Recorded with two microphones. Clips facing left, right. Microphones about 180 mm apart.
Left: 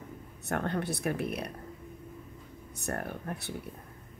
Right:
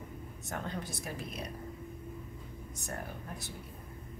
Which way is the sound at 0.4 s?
65° left (ahead or behind).